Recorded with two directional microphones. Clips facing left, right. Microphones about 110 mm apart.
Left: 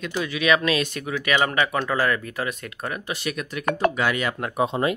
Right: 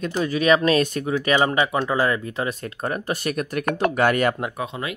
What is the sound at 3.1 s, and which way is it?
Speech, 45° right (ahead or behind).